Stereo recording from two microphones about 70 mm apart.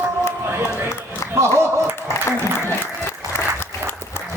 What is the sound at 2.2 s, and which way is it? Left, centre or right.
Applause, left.